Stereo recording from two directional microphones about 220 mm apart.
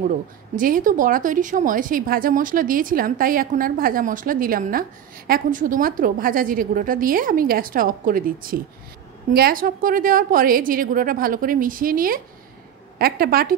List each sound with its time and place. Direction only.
0.6 s a woman's voice: 40° right (ahead or behind)